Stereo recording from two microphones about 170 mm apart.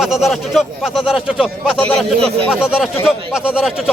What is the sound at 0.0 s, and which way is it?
Speech, centre (ahead or behind).